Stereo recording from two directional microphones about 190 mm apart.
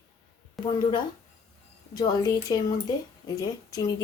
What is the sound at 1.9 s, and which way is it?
Speech, 20° left (ahead or behind).